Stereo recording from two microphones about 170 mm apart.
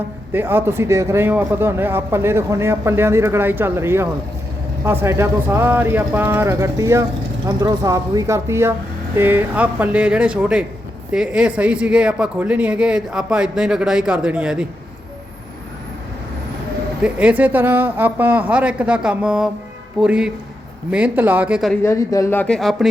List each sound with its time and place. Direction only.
0.3 s a man's voice: 15° right (ahead or behind)
17.0 s a man's voice: 5° right (ahead or behind)
21.8 s speech: 20° left (ahead or behind); by 22.9 s centre (ahead or behind)